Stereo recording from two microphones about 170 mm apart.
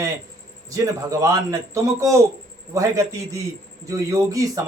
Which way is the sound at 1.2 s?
20° right (ahead or behind).